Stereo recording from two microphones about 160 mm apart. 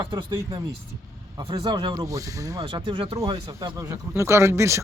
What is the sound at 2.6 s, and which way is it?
Speech, 35° right (ahead or behind).